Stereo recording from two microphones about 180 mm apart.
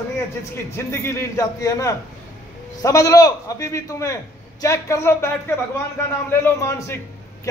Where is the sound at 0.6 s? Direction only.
15° left (ahead or behind).